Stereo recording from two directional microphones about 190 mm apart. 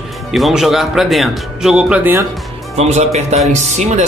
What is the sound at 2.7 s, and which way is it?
A man's voice, 35° right (ahead or behind).